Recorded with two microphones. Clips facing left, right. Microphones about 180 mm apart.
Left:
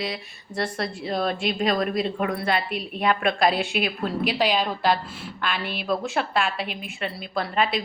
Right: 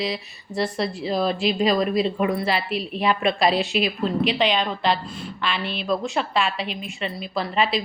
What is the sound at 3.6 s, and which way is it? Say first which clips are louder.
Speech: right 3 dB; 55° left (ahead or behind).